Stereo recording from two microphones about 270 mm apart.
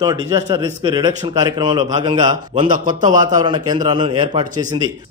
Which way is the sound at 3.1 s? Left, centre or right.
Centre.